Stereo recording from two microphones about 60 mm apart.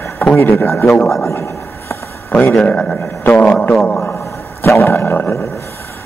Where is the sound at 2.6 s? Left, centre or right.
Centre.